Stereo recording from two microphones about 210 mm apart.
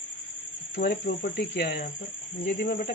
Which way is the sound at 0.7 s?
45° left (ahead or behind).